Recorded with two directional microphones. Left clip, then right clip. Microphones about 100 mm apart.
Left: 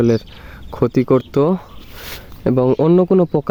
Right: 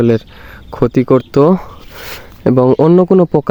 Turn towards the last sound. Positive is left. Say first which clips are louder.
# right 4 dB
turn(degrees=-40)  # may be behind; listen again after turning